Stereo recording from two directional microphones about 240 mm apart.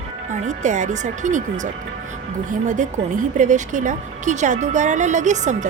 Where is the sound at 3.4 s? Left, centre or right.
Right.